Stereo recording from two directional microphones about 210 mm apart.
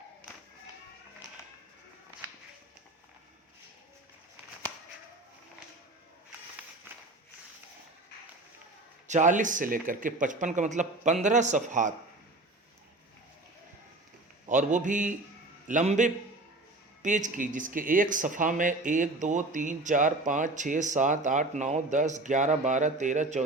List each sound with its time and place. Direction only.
9.0 s speech: 35° right (ahead or behind)
14.4 s a man's voice: 35° right (ahead or behind)